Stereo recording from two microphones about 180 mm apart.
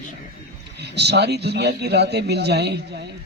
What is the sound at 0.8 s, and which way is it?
A man's voice, 70° right (ahead or behind).